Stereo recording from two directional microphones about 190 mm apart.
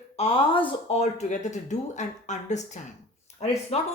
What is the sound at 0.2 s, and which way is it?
Speech, 30° left (ahead or behind).